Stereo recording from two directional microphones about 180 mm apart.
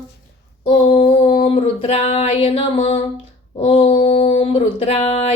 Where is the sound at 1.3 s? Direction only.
30° left (ahead or behind).